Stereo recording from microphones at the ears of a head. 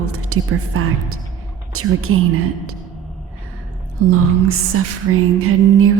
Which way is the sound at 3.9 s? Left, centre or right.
Right.